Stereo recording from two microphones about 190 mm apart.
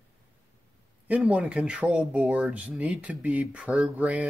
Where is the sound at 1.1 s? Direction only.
5° right (ahead or behind).